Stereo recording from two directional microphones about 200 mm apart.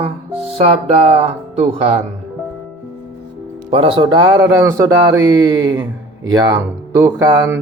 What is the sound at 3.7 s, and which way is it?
Speech, 25° right (ahead or behind).